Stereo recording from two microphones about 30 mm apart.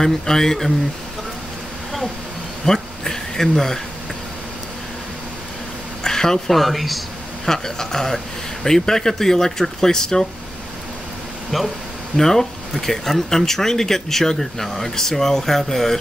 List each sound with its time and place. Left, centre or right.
0.0 s speech: centre
2.6 s speech: centre
6.0 s a sound: centre
6.5 s speech: centre
7.4 s speech: centre
11.5 s speech: centre
12.2 s speech: centre